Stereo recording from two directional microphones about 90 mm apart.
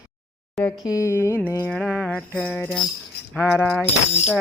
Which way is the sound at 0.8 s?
35° left (ahead or behind).